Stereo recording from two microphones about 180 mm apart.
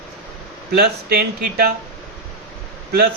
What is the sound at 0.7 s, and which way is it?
A man's voice, 60° right (ahead or behind).